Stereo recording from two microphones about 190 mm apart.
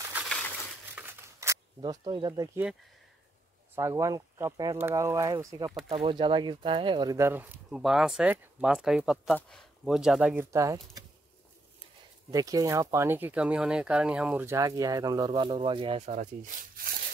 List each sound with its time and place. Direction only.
0.1 s crushing: centre (ahead or behind)
0.9 s scissors: 10° right (ahead or behind)
1.8 s speech: 25° right (ahead or behind)
3.7 s speech: 15° right (ahead or behind)
10.5 s speech: 15° right (ahead or behind)
12.3 s speech: 20° right (ahead or behind)